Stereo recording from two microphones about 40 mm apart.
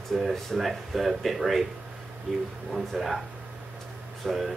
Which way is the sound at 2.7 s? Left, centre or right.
Centre.